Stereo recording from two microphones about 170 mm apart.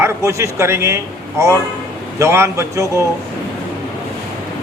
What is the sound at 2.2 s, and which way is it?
Speech, 15° right (ahead or behind).